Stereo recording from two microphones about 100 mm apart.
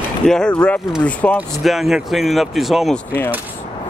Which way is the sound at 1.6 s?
Centre (ahead or behind).